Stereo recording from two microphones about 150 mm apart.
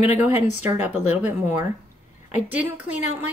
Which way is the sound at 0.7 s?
10° right (ahead or behind).